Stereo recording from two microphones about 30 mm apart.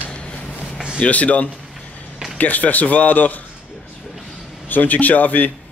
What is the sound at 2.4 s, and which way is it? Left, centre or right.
Speech, left.